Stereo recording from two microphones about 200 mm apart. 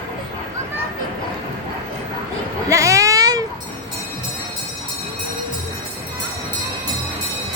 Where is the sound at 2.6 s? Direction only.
15° right (ahead or behind).